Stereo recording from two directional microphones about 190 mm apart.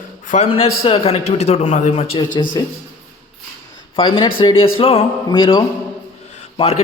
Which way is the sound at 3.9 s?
25° left (ahead or behind).